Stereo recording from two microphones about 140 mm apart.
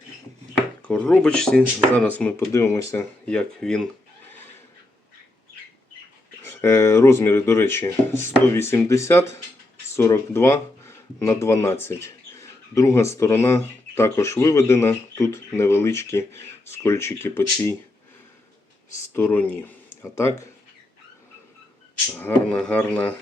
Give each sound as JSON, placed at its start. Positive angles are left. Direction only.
{"t": 0.9, "sound": "speech", "side_deg": 5}
{"t": 3.2, "sound": "speech", "side_deg": 5}
{"t": 6.6, "sound": "speech", "side_deg": 20}
{"t": 19.1, "sound": "speech", "side_deg": 10}
{"t": 22.1, "sound": "speech", "side_deg": 5}